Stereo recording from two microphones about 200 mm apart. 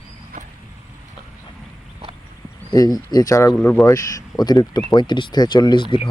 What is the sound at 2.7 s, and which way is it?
Speech, 20° left (ahead or behind).